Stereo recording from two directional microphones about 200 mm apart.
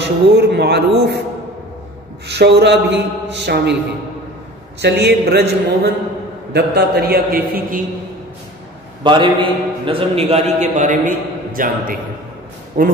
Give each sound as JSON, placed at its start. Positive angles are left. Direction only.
{"t": 0.0, "sound": "a man's voice", "side_deg": -55}
{"t": 2.2, "sound": "a man's voice", "side_deg": -60}
{"t": 4.8, "sound": "a man's voice", "side_deg": -55}
{"t": 6.5, "sound": "a man's voice", "side_deg": -55}
{"t": 9.0, "sound": "a man's voice", "side_deg": -25}